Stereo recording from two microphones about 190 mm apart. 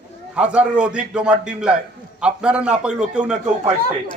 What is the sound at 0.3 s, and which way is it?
A man's voice, 5° right (ahead or behind).